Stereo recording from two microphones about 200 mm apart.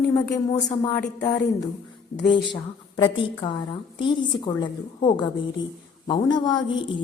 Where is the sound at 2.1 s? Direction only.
60° left (ahead or behind).